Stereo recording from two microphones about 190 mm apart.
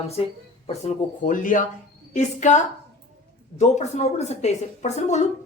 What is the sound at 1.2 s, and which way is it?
A woman's voice, 45° left (ahead or behind).